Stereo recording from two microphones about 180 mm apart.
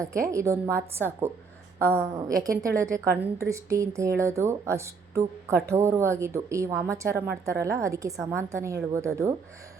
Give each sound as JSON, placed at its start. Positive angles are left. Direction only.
{"t": 0.0, "sound": "a woman's voice", "side_deg": -15}